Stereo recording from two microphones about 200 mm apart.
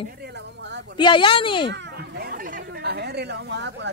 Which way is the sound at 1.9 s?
50° right (ahead or behind).